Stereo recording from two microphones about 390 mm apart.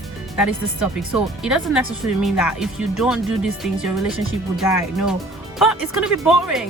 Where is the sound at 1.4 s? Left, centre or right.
Centre.